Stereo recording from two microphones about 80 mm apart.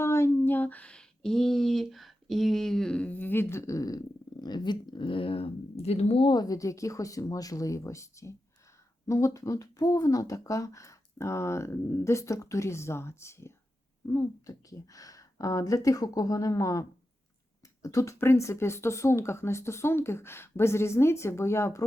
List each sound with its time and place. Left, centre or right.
0.0 s speech: left
6.2 s speech: left
14.4 s speech: left
17.8 s speech: left